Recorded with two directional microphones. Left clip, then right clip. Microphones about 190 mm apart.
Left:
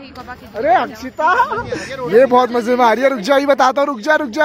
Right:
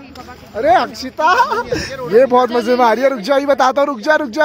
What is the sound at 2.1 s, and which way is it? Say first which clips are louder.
A man's voice: even; 5° left (ahead or behind).